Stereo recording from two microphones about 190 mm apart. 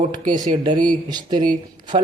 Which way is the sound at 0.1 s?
25° right (ahead or behind).